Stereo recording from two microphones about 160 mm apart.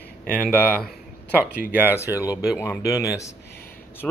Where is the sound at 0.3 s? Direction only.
10° right (ahead or behind).